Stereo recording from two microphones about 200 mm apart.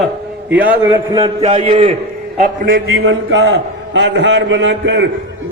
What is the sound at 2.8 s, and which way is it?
A man's voice, 80° right.